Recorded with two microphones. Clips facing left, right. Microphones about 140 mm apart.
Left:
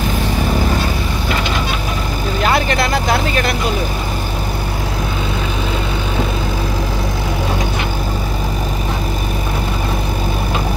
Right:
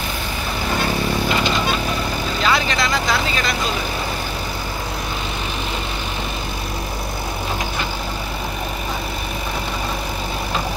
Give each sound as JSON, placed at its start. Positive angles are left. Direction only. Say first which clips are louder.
{"t": 2.4, "sound": "speech", "louder": "left 4 dB", "side_deg": 55}